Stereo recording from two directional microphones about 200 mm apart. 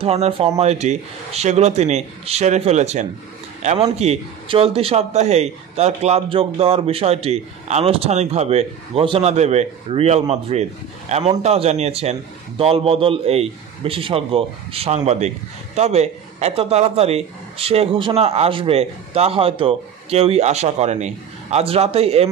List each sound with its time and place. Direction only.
0.0 s a man's voice: 30° right (ahead or behind)